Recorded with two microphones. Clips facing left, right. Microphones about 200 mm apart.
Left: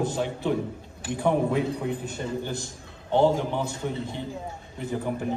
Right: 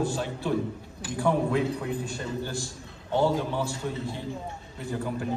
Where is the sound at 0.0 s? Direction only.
20° left (ahead or behind).